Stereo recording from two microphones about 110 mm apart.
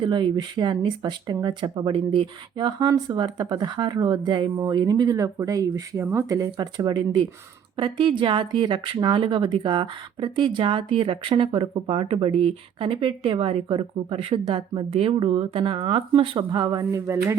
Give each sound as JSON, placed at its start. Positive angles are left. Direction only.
{"t": 0.0, "sound": "speech", "side_deg": -45}
{"t": 7.8, "sound": "speech", "side_deg": -50}
{"t": 16.9, "sound": "speech", "side_deg": -25}